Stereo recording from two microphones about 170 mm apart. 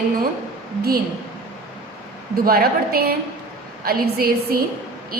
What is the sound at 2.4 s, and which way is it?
A woman's voice, 60° right (ahead or behind).